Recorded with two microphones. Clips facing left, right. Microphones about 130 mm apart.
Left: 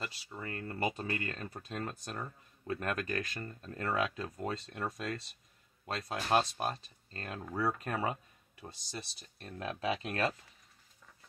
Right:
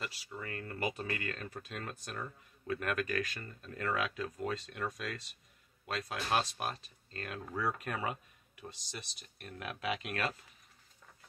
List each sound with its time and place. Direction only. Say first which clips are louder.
0.0 s speech: left 1 dB; 30° left (ahead or behind)